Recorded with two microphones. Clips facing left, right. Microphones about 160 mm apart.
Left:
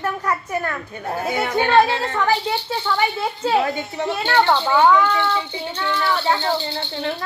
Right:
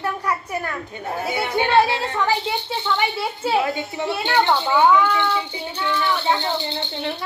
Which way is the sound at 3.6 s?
20° right (ahead or behind).